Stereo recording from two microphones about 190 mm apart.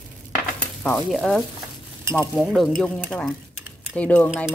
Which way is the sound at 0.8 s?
Centre (ahead or behind).